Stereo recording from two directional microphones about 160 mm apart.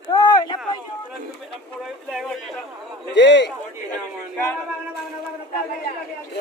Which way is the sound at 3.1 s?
90° left.